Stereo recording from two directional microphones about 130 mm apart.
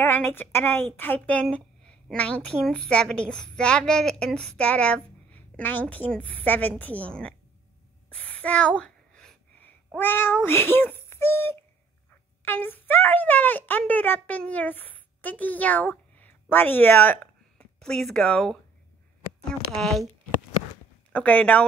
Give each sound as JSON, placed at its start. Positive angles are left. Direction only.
{"t": 0.0, "sound": "a woman's voice", "side_deg": 15}
{"t": 8.1, "sound": "a sound", "side_deg": 10}
{"t": 9.9, "sound": "a woman's voice", "side_deg": 15}
{"t": 19.7, "sound": "speech", "side_deg": 0}
{"t": 21.1, "sound": "a woman's voice", "side_deg": 10}